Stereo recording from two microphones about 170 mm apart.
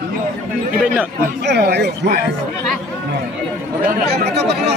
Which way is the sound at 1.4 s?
80° right.